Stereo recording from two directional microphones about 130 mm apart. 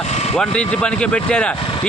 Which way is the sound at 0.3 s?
10° left (ahead or behind).